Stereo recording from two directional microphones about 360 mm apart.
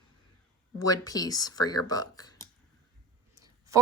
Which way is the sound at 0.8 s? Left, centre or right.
Centre.